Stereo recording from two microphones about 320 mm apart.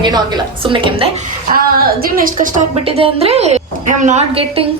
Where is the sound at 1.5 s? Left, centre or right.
Right.